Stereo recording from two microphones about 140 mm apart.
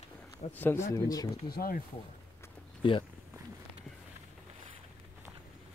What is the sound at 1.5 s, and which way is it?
Speech, 90° left.